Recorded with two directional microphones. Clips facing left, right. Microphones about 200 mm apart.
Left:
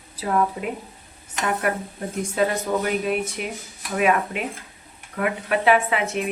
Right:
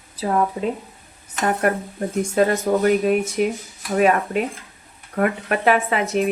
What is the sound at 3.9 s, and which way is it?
Speech, 40° right (ahead or behind).